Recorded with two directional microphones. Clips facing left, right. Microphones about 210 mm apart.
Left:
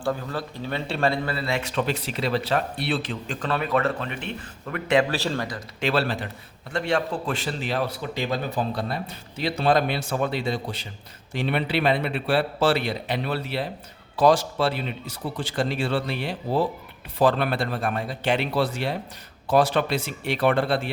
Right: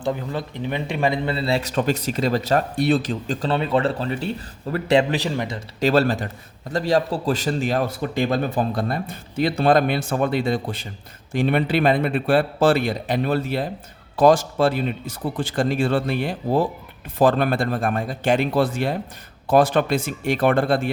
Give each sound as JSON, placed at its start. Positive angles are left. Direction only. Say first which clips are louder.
{"t": 0.0, "sound": "speech", "louder": "right 2 dB", "side_deg": -20}
{"t": 5.1, "sound": "speech", "louder": "right 3 dB", "side_deg": -15}
{"t": 5.8, "sound": "a man's voice", "louder": "right 6 dB", "side_deg": -45}